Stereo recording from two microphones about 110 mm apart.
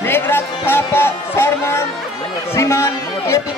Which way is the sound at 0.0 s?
20° left (ahead or behind).